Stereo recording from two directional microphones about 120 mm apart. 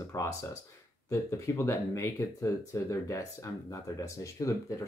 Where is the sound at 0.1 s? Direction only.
30° left (ahead or behind).